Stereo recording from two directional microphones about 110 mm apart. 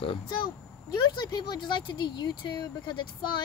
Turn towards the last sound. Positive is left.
turn(degrees=45)  # may be behind; listen again after turning